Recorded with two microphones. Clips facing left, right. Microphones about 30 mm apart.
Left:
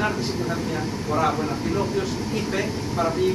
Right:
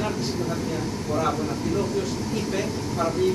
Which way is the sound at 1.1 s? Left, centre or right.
Left.